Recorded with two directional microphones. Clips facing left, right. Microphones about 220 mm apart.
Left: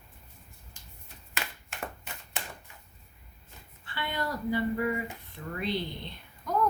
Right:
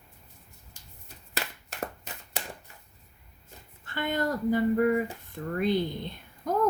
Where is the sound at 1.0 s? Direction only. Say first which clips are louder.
Right 3 dB; 40° right (ahead or behind).